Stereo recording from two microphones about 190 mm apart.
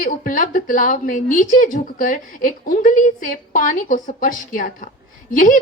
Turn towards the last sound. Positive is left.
turn(degrees=45)  # may be behind; listen again after turning